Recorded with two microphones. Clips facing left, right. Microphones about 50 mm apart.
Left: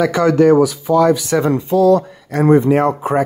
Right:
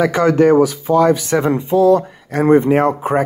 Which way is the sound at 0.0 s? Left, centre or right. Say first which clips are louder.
Even; right.